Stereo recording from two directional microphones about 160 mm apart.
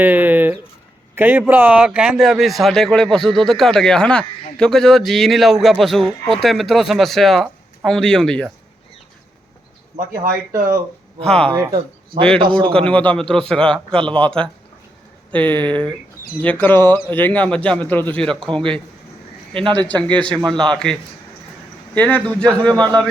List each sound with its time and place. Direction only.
0.0 s speech: 10° right (ahead or behind); by 8.4 s 5° left (ahead or behind)
11.2 s speech: 5° left (ahead or behind)
11.5 s a man's voice: 25° right (ahead or behind)
12.7 s a man's voice: 10° left (ahead or behind)
19.9 s a man's voice: 10° left (ahead or behind)
22.7 s a man's voice: 25° right (ahead or behind)